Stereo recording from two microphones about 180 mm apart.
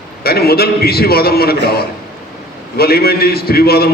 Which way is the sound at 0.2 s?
60° left (ahead or behind).